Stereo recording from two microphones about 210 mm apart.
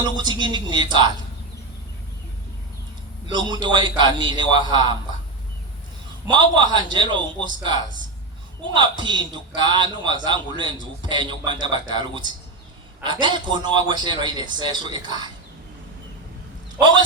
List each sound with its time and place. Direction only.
0.0 s a man's voice: 20° right (ahead or behind)
3.3 s a man's voice: 20° right (ahead or behind)
6.2 s a man's voice: 20° right (ahead or behind)